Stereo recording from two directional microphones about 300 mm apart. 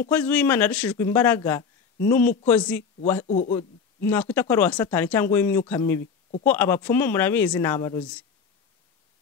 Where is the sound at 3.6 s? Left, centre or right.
Centre.